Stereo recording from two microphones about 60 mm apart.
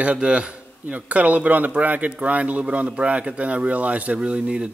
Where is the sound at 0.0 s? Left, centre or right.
Centre.